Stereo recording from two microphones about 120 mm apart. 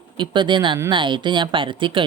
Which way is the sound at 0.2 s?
40° right (ahead or behind).